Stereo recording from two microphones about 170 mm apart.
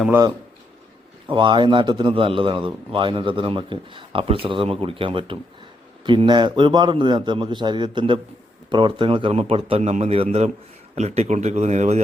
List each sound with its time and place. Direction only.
1.3 s a man's voice: 30° right (ahead or behind)